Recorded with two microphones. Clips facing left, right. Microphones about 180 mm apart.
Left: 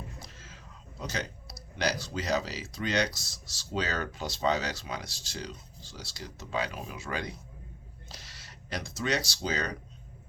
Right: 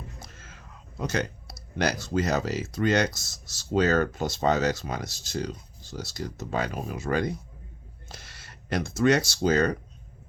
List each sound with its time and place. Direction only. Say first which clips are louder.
0.2 s speech: right 1 dB; 50° right (ahead or behind)